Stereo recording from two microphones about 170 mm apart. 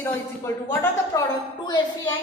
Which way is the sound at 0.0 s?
15° left (ahead or behind).